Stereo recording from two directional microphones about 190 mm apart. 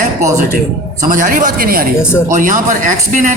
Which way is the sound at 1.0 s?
45° right (ahead or behind).